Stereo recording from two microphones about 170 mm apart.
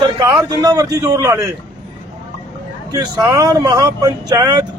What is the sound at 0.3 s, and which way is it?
Speech, 20° right (ahead or behind).